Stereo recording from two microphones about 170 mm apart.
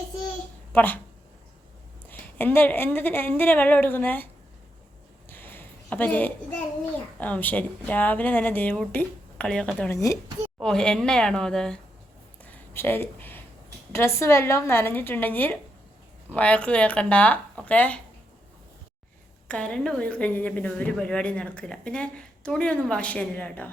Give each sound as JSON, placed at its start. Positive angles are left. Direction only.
{"t": 0.7, "sound": "speech", "side_deg": 10}
{"t": 2.0, "sound": "a woman's voice", "side_deg": 10}
{"t": 5.3, "sound": "a sound", "side_deg": 10}
{"t": 7.2, "sound": "a woman's voice", "side_deg": 10}
{"t": 9.9, "sound": "speech", "side_deg": 20}
{"t": 10.6, "sound": "a woman's voice", "side_deg": 5}
{"t": 12.4, "sound": "a sound", "side_deg": 15}
{"t": 13.9, "sound": "a woman's voice", "side_deg": 15}
{"t": 19.5, "sound": "a woman's voice", "side_deg": 5}